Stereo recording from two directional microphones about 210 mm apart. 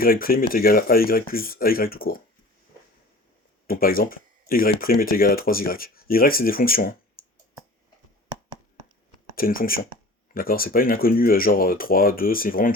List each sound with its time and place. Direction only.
0.0 s speech: 45° left (ahead or behind)
3.7 s speech: 45° left (ahead or behind)
9.3 s speech: 45° left (ahead or behind)